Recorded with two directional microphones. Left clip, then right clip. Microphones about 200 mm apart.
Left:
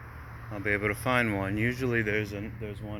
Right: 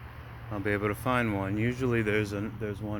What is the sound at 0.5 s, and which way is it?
Speech, 20° right (ahead or behind).